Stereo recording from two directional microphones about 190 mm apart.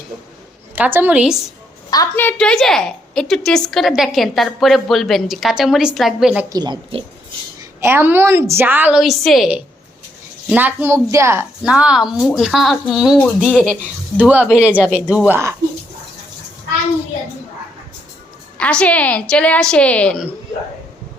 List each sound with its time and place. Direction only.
0.8 s a woman's voice: 10° right (ahead or behind)
1.9 s a woman's voice: 15° left (ahead or behind); by 6.4 s 5° right (ahead or behind)
6.5 s a woman's voice: 20° right (ahead or behind); by 13.7 s 5° left (ahead or behind)
14.2 s a woman's voice: 10° right (ahead or behind)
18.5 s a woman's voice: 5° left (ahead or behind)